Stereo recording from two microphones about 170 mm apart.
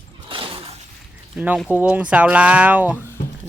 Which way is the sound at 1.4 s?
5° right (ahead or behind).